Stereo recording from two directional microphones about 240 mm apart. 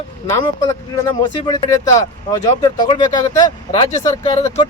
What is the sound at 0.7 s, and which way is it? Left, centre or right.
Speech, centre.